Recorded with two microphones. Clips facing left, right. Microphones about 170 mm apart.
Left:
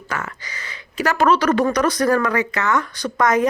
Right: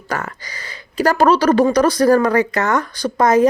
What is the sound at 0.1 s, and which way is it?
Speech, 35° right (ahead or behind).